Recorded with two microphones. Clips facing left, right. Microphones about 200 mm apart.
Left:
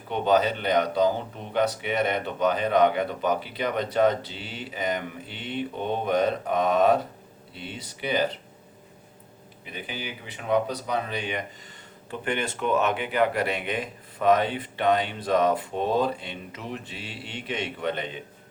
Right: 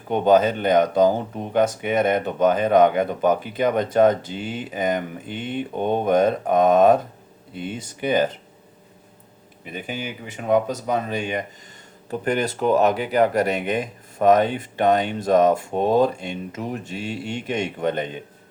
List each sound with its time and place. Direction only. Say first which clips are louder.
0.1 s speech: right 6 dB; 50° right (ahead or behind)
9.7 s speech: right 5 dB; 45° right (ahead or behind)